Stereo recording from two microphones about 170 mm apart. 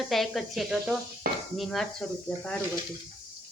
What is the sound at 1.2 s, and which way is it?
Dishes, 65° right (ahead or behind).